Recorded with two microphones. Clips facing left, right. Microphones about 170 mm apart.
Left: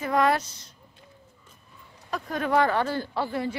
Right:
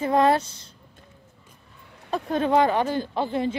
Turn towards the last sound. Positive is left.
turn(degrees=-20)  # may be behind; listen again after turning